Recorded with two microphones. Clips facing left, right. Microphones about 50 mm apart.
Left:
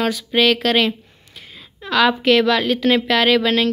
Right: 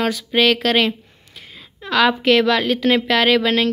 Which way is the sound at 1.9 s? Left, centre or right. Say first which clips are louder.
Even; right.